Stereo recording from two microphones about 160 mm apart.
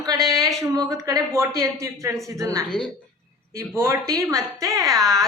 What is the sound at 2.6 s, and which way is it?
Speech, 5° left (ahead or behind).